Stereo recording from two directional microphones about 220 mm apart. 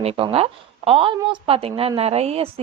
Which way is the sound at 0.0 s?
25° right (ahead or behind).